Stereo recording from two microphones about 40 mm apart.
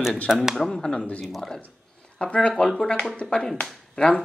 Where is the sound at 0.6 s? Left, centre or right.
Centre.